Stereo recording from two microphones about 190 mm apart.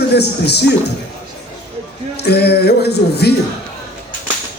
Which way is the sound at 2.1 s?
60° left (ahead or behind).